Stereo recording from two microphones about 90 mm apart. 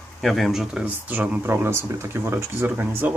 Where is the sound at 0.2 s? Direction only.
Centre (ahead or behind).